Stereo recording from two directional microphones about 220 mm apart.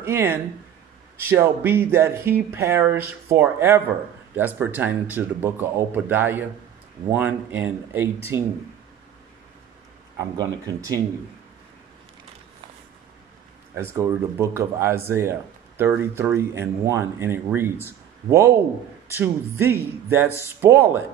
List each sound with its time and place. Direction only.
0.0 s speech: 10° right (ahead or behind)
10.1 s speech: 20° right (ahead or behind)
13.7 s speech: 10° right (ahead or behind)
19.1 s speech: 10° right (ahead or behind)